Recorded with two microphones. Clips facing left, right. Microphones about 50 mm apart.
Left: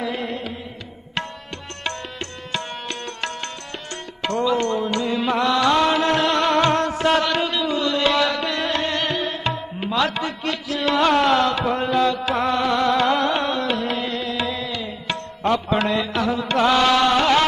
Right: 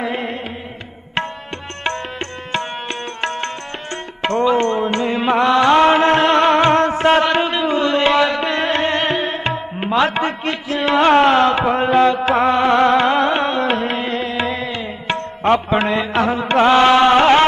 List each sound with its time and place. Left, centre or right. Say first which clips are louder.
0.0 s music: right 3 dB; right
2.5 s music: right 5 dB; right